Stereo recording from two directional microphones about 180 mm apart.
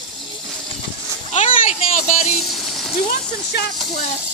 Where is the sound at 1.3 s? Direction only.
40° left (ahead or behind).